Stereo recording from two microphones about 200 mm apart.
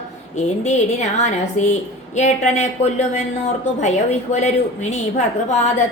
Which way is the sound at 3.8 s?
35° left (ahead or behind).